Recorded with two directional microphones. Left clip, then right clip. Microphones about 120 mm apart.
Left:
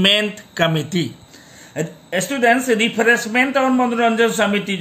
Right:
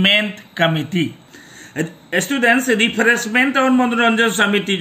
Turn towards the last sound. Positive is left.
turn(degrees=55)  # may be behind; listen again after turning